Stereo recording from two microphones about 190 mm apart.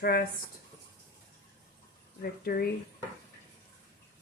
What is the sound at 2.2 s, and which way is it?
Speech, 50° left (ahead or behind).